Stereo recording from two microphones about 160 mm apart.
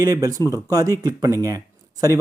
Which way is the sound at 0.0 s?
20° right (ahead or behind).